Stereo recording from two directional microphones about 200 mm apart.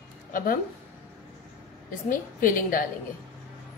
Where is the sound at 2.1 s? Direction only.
40° left (ahead or behind).